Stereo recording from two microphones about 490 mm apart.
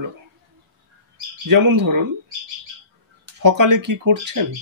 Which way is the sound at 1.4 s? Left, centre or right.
Right.